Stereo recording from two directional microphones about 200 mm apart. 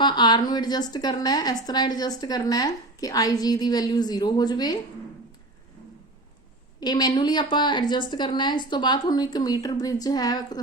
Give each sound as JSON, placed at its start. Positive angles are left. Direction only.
{"t": 0.0, "sound": "a woman's voice", "side_deg": 20}
{"t": 6.7, "sound": "a woman's voice", "side_deg": 20}